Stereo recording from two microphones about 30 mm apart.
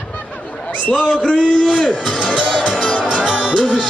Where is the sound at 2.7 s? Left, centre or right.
Left.